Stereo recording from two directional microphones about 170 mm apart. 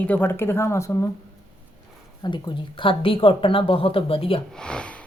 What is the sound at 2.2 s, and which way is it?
Speech, 25° left (ahead or behind).